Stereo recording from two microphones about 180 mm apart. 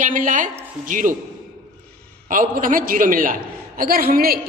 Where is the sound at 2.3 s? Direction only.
50° right (ahead or behind).